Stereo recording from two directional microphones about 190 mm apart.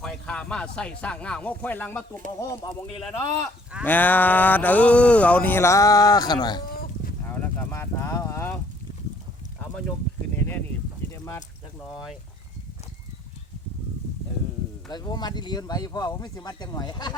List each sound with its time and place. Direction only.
0.0 s speech: 5° left (ahead or behind)
3.8 s speech: 10° left (ahead or behind)
7.3 s clip-clop: 10° left (ahead or behind)
9.6 s a sound: 5° left (ahead or behind)
14.8 s speech: 20° left (ahead or behind)